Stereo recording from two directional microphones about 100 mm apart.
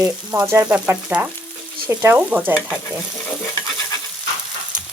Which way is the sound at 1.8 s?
25° right (ahead or behind).